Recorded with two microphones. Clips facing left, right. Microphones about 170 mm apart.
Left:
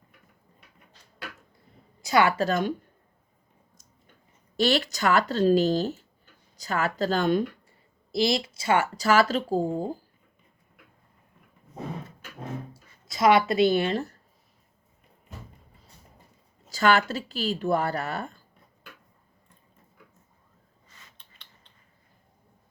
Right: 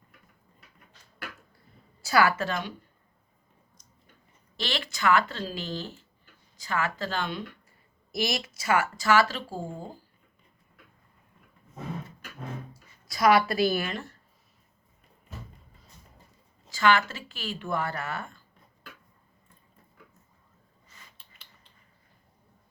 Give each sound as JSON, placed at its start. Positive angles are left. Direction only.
{"t": 2.0, "sound": "a woman's voice", "side_deg": 20}
{"t": 2.3, "sound": "speech", "side_deg": 40}
{"t": 4.5, "sound": "speech", "side_deg": 45}
{"t": 8.1, "sound": "speech", "side_deg": 30}
{"t": 12.7, "sound": "speech", "side_deg": 25}
{"t": 16.7, "sound": "speech", "side_deg": 40}
{"t": 21.2, "sound": "a sound", "side_deg": -5}